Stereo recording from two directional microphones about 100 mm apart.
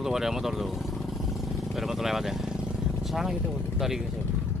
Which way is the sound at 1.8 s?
5° right (ahead or behind).